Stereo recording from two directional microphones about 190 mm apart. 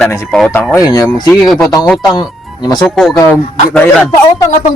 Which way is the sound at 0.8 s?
20° left (ahead or behind).